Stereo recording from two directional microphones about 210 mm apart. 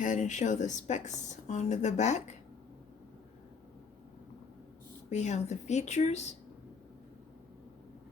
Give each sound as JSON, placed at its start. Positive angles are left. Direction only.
{"t": 0.0, "sound": "a woman's voice", "side_deg": 35}
{"t": 5.0, "sound": "a woman's voice", "side_deg": 35}